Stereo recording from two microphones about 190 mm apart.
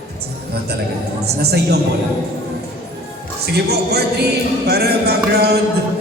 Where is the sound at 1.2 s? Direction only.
60° right (ahead or behind).